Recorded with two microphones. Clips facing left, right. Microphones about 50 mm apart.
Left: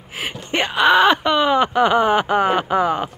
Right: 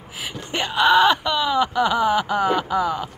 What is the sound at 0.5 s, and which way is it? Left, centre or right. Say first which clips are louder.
Speech: left 2 dB; left.